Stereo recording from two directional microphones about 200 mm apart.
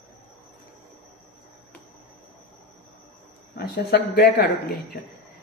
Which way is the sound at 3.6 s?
55° left (ahead or behind).